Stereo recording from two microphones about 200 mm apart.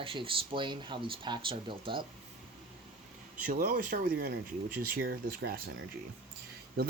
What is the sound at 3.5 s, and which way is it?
Speech, 45° right (ahead or behind).